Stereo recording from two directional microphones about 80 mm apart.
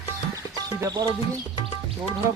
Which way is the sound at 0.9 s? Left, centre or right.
Right.